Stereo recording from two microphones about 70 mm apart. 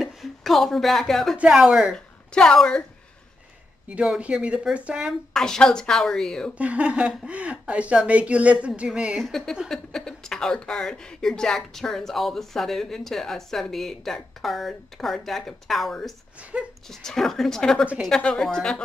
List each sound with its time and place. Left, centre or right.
0.0 s speech: centre
1.5 s speech: centre
2.3 s a woman's voice: centre
4.2 s speech: centre
5.3 s a woman's voice: centre
6.6 s speech: centre
9.2 s a woman's voice: centre